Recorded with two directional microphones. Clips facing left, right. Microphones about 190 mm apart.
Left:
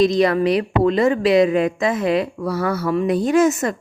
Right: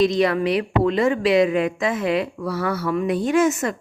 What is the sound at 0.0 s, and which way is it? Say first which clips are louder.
A woman's voice: left 3 dB; 40° left (ahead or behind).